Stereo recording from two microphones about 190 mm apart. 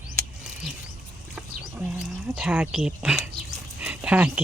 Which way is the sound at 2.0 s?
5° right (ahead or behind).